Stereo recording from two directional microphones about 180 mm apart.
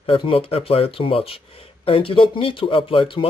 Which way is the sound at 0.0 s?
30° left (ahead or behind).